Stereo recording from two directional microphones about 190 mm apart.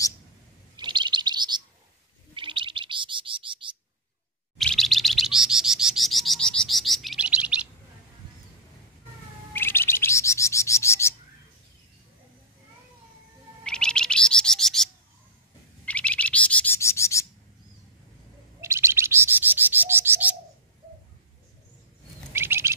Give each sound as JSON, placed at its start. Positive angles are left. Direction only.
{"t": 0.7, "sound": "chirp", "side_deg": -25}
{"t": 2.3, "sound": "bird", "side_deg": -25}
{"t": 4.6, "sound": "bird", "side_deg": 0}
{"t": 9.5, "sound": "bird", "side_deg": 10}
{"t": 13.7, "sound": "bird", "side_deg": 5}
{"t": 18.6, "sound": "bird", "side_deg": -15}
{"t": 22.3, "sound": "bird", "side_deg": -10}